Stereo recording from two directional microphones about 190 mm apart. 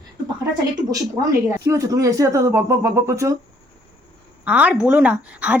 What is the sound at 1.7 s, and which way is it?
Speech, 20° right (ahead or behind).